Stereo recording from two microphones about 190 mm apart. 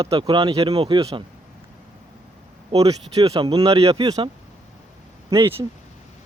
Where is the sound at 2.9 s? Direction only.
20° right (ahead or behind).